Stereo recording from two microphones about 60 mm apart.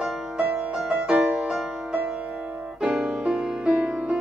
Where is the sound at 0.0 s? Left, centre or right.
Centre.